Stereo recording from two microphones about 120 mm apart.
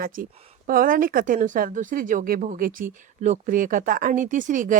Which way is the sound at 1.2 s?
90° right.